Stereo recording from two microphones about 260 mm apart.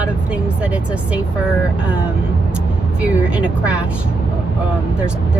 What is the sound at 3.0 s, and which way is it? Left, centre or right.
Speech, centre.